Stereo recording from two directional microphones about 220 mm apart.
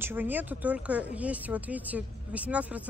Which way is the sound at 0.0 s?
10° right (ahead or behind).